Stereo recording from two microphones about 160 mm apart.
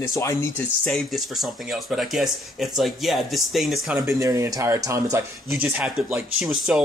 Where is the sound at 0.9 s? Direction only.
Centre (ahead or behind).